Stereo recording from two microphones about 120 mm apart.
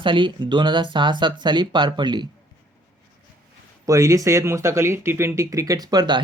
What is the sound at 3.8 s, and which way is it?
Speech, 25° right (ahead or behind).